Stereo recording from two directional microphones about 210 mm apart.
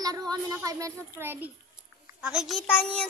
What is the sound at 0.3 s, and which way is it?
A child's voice, 15° right (ahead or behind).